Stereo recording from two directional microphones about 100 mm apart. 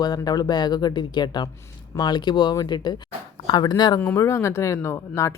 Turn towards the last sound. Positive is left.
turn(degrees=30)  # may be behind; listen again after turning